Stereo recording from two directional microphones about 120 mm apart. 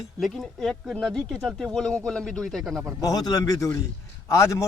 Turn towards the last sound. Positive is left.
turn(degrees=25)  # may be behind; listen again after turning